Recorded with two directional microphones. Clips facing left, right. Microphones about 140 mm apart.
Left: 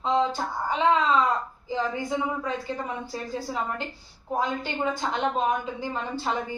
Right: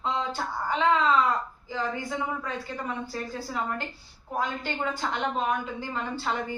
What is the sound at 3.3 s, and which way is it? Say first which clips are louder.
A woman's voice: left 3 dB; 20° left (ahead or behind).